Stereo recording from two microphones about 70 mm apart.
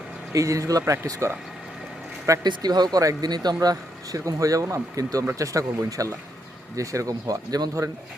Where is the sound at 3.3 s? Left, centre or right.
Right.